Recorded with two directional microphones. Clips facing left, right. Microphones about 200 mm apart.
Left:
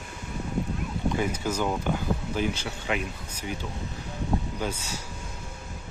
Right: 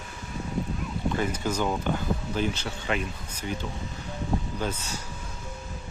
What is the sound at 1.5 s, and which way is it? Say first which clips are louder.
Speech: right 1 dB; 10° left (ahead or behind).